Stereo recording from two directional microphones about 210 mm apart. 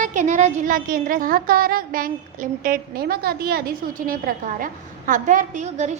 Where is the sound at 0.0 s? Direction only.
35° right (ahead or behind).